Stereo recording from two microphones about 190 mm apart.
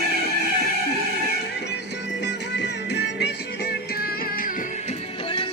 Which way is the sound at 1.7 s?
65° left (ahead or behind).